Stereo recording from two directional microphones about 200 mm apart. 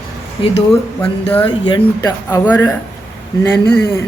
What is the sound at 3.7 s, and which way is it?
Speech, 10° left (ahead or behind).